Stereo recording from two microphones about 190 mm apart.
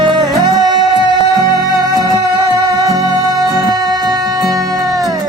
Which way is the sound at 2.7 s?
20° right (ahead or behind).